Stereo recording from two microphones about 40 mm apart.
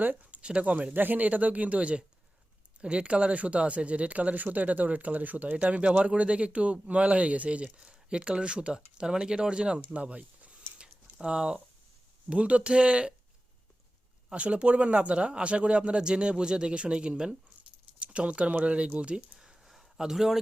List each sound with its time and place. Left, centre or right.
0.0 s speech: right
0.4 s speech: right
0.9 s speech: right
5.5 s speech: right
7.8 s speech: right
9.9 s speech: right
10.8 s a sound: right
12.3 s speech: right
14.3 s speech: right
19.4 s a sound: centre
20.0 s speech: centre